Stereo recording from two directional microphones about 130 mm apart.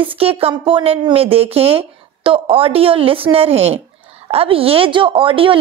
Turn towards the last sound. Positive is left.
turn(degrees=-40)  # may be behind; listen again after turning